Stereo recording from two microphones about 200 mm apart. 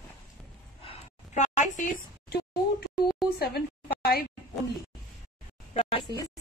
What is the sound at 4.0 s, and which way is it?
Speech, 50° left (ahead or behind).